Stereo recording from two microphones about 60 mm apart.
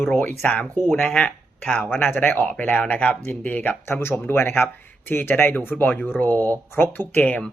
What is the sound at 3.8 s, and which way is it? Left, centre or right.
Speech, left.